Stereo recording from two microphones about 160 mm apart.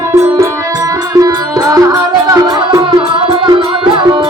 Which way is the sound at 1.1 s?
25° right (ahead or behind).